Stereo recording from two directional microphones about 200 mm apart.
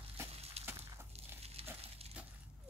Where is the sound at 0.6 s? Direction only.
30° right (ahead or behind).